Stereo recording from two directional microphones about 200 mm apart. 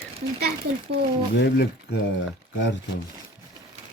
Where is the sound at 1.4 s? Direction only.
60° left (ahead or behind).